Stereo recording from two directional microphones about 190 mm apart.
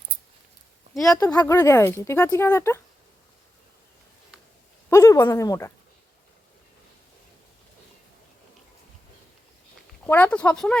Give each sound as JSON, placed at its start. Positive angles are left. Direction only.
{"t": 0.9, "sound": "speech", "side_deg": 5}
{"t": 1.2, "sound": "speech", "side_deg": 20}
{"t": 4.9, "sound": "speech", "side_deg": 15}
{"t": 10.0, "sound": "speech", "side_deg": 10}